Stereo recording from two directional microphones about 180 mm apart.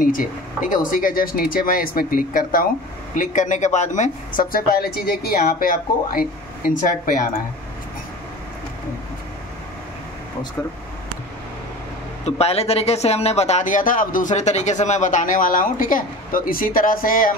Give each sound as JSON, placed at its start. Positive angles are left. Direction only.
{"t": 0.0, "sound": "speech", "side_deg": 50}
{"t": 12.3, "sound": "speech", "side_deg": 35}